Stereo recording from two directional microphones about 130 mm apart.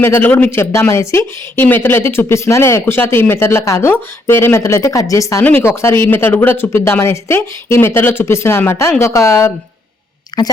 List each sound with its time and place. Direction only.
0.0 s speech: 15° left (ahead or behind); by 10.5 s 30° left (ahead or behind)